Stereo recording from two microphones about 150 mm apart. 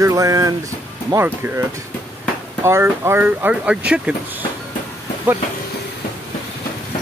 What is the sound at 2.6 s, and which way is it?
Speech, 15° right (ahead or behind).